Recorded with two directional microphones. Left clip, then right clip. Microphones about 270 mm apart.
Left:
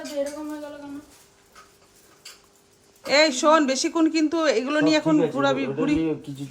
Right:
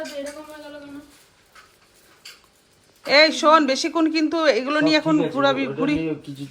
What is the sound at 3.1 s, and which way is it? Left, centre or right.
A man's voice, centre.